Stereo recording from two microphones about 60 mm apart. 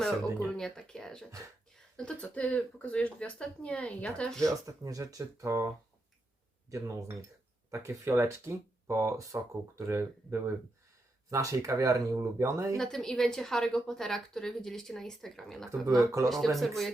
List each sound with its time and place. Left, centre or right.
0.5 s a woman's voice: centre
2.2 s a woman's voice: left
4.4 s speech: right
11.3 s speech: right
12.7 s a woman's voice: centre
15.9 s speech: right
16.6 s speech: centre